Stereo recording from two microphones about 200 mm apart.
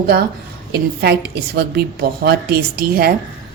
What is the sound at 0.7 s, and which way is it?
A woman's voice, 55° right (ahead or behind).